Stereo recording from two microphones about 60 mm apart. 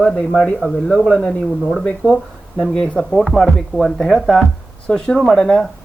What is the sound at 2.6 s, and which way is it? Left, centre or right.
Speech, centre.